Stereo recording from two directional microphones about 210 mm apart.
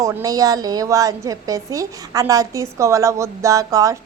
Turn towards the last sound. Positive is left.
turn(degrees=-15)  # may be behind; listen again after turning